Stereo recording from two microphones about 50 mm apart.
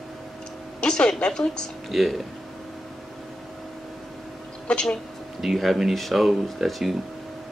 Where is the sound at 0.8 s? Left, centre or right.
Centre.